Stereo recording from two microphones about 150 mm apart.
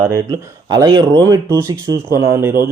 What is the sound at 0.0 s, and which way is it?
Speech, 25° right (ahead or behind).